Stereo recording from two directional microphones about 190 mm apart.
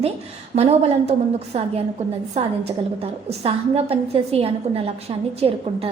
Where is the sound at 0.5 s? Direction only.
35° right (ahead or behind).